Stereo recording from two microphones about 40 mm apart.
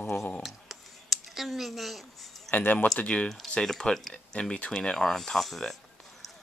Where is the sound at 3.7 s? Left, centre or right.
Centre.